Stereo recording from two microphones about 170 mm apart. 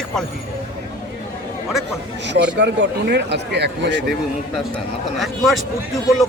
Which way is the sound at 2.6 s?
90° right.